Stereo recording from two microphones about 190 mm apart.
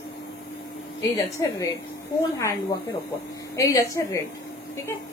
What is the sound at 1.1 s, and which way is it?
Speech, 15° left (ahead or behind).